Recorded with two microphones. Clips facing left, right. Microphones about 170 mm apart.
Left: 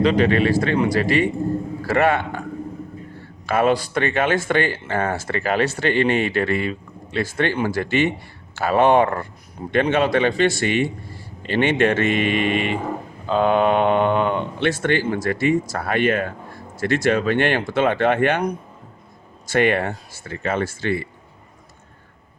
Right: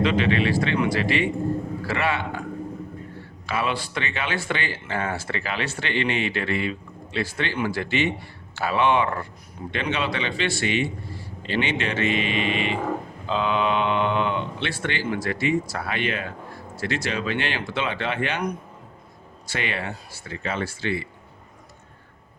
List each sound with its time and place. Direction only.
0.0 s speech: 40° left (ahead or behind)
3.4 s speech: 50° left (ahead or behind)
19.5 s speech: 50° left (ahead or behind)